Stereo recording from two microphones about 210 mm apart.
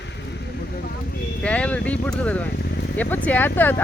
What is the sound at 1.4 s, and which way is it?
Speech, 5° left (ahead or behind).